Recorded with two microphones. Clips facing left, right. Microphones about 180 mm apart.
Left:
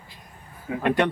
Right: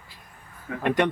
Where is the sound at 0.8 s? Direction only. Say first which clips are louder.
Left 1 dB; 20° right (ahead or behind).